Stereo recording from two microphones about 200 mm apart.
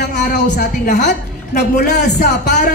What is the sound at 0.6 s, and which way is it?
Speech, 40° left (ahead or behind).